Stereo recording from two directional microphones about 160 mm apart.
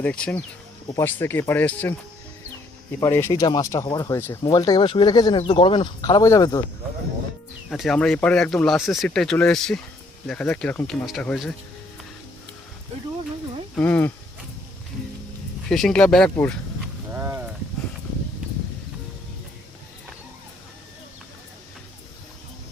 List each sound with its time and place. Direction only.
0.0 s speech: 5° left (ahead or behind)
3.0 s speech: 15° left (ahead or behind)
7.7 s speech: centre (ahead or behind)
13.7 s speech: 10° left (ahead or behind)
15.7 s speech: 5° left (ahead or behind)
17.1 s a sound: 15° right (ahead or behind)